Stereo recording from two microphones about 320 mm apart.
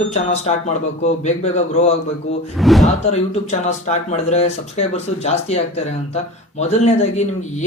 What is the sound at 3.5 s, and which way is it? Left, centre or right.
Speech, left.